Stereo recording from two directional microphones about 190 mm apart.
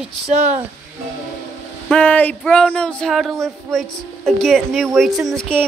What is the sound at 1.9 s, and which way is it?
Speech, 5° left (ahead or behind).